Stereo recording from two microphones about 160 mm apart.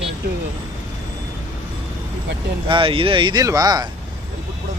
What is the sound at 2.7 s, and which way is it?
Speech, 30° right (ahead or behind).